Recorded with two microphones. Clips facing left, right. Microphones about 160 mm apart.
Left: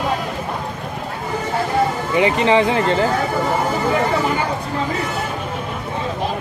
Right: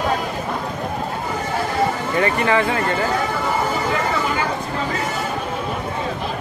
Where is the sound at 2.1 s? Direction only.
20° left (ahead or behind).